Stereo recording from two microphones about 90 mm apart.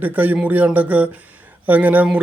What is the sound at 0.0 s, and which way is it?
Speech, 20° right (ahead or behind).